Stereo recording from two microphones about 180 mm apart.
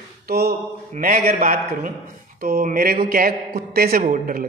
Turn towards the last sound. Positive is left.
turn(degrees=-55)  # may be behind; listen again after turning